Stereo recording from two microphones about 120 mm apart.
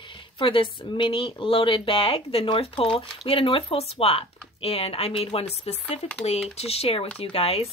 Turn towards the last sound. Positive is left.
turn(degrees=55)  # may be behind; listen again after turning